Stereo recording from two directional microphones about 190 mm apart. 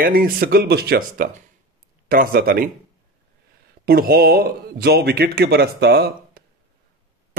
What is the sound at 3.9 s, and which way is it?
Speech, 50° right (ahead or behind).